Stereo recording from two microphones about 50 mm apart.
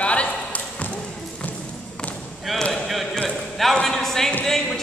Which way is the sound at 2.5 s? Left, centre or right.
Centre.